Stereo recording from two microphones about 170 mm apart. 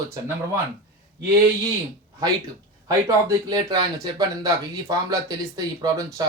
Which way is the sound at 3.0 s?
20° right (ahead or behind).